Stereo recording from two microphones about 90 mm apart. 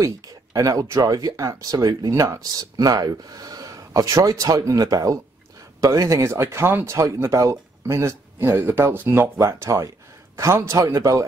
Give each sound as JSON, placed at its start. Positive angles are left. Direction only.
{"t": 0.0, "sound": "a man's voice", "side_deg": -40}